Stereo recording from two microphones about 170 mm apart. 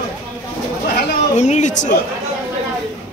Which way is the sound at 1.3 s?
45° left (ahead or behind).